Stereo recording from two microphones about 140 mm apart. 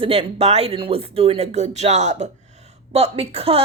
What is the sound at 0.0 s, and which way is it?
Speech, 45° right (ahead or behind).